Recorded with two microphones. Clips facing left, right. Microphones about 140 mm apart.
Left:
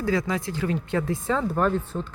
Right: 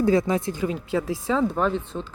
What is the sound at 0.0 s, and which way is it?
Speech, 25° right (ahead or behind).